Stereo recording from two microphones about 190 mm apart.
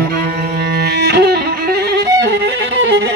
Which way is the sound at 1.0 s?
60° right (ahead or behind).